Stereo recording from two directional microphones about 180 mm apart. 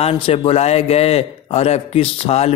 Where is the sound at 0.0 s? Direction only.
35° left (ahead or behind).